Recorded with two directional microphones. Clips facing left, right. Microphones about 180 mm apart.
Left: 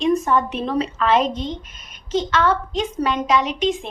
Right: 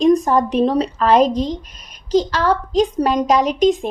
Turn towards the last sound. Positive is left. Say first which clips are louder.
# right 5 dB
turn(degrees=-40)  # may be behind; listen again after turning